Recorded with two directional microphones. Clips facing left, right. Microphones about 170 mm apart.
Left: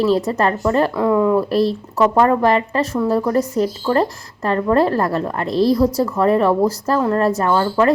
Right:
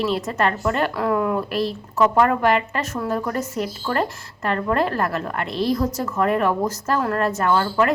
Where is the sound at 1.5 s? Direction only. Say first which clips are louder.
Left 7 dB; 35° left (ahead or behind).